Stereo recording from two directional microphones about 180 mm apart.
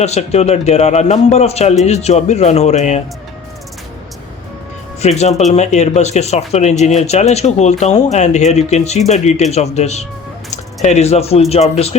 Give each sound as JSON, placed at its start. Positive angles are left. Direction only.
{"t": 0.0, "sound": "speech", "side_deg": 35}
{"t": 4.9, "sound": "speech", "side_deg": 35}